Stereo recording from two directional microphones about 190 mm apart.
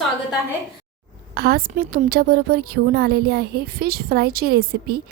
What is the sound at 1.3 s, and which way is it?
A woman's voice, 55° right (ahead or behind).